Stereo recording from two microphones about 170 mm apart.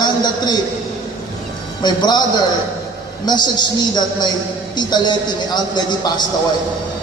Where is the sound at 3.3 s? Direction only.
25° left (ahead or behind).